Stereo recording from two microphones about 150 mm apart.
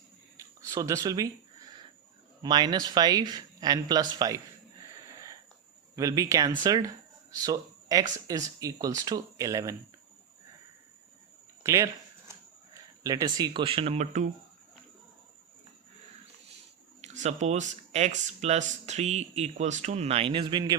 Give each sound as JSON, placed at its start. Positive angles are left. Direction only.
{"t": 0.7, "sound": "speech", "side_deg": -20}
{"t": 2.4, "sound": "speech", "side_deg": -30}
{"t": 6.0, "sound": "speech", "side_deg": -20}
{"t": 11.6, "sound": "speech", "side_deg": -20}
{"t": 17.0, "sound": "speech", "side_deg": -50}